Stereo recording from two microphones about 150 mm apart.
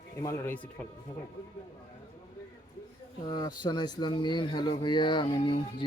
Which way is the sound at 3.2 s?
30° left (ahead or behind).